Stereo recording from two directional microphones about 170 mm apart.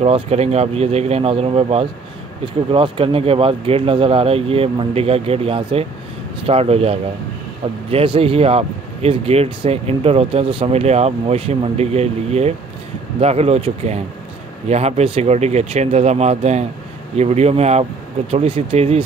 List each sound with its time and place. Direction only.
0.0 s speech: 40° right (ahead or behind)